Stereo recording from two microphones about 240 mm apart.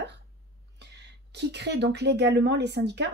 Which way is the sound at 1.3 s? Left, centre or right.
Right.